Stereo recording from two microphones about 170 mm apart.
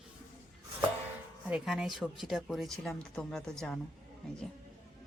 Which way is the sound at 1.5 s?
Centre (ahead or behind).